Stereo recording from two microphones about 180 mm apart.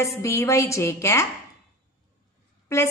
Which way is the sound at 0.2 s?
15° left (ahead or behind).